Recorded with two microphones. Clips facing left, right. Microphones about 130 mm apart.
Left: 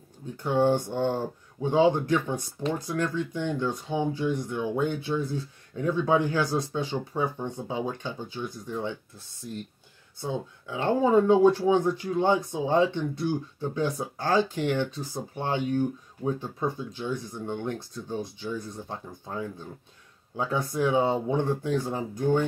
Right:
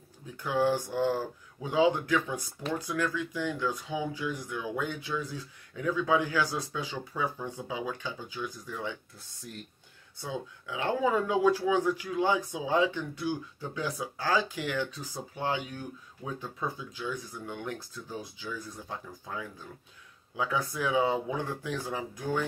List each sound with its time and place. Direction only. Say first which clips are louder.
0.4 s speech: left 4 dB; 25° left (ahead or behind)
10.3 s speech: left 3 dB; 35° left (ahead or behind)